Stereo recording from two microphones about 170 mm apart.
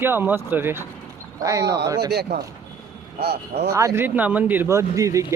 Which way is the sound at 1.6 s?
75° right (ahead or behind).